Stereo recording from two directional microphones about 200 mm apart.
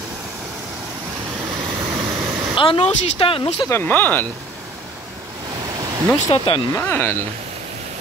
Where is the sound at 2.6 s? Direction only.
30° left (ahead or behind).